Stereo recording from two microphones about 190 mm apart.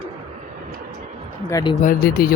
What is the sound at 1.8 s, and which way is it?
Speech, 50° left (ahead or behind).